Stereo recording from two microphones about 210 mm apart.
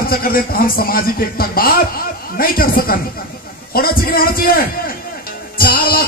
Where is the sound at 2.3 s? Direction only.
45° left (ahead or behind).